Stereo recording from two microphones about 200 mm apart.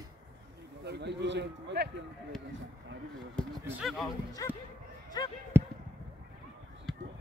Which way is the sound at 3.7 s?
5° right (ahead or behind).